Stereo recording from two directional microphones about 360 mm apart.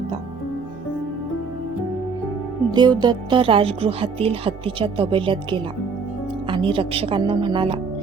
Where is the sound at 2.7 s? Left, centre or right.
Centre.